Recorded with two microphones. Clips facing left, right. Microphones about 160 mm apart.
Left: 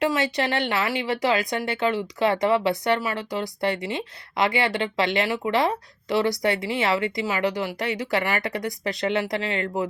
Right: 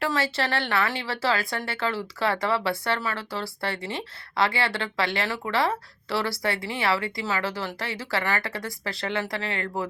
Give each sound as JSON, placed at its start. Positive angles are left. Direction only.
{"t": 0.0, "sound": "speech", "side_deg": 20}